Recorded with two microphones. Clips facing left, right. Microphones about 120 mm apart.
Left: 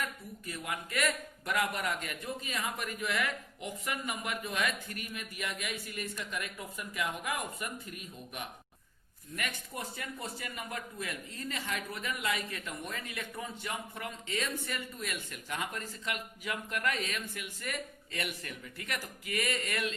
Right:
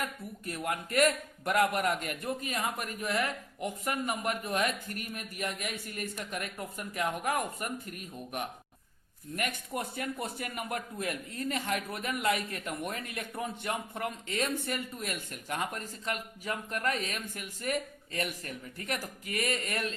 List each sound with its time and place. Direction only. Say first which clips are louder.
0.4 s a man's voice: right 5 dB; 50° right (ahead or behind)